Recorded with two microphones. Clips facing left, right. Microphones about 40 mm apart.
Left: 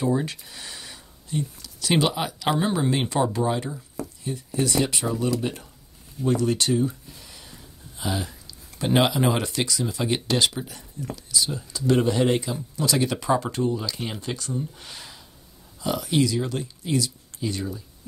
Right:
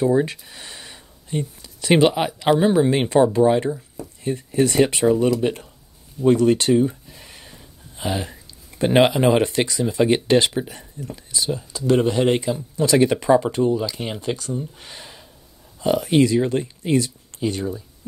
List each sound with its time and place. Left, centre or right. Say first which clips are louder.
0.0 s speech: right 6 dB; centre
2.9 s speech: right 7 dB; right
4.2 s speech: right 8 dB; right
7.2 s a sound: right 3 dB; right
8.0 s speech: right 3 dB; right
13.3 s speech: right 4 dB; centre
15.8 s speech: right 6 dB; right